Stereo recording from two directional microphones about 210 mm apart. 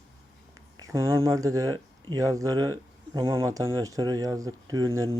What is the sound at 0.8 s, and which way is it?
Speech, 15° right (ahead or behind).